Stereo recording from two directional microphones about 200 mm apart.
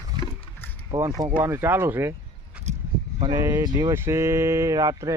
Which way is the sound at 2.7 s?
35° right (ahead or behind).